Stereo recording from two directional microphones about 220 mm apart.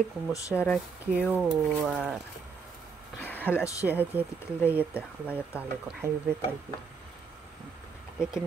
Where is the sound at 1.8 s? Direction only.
5° right (ahead or behind).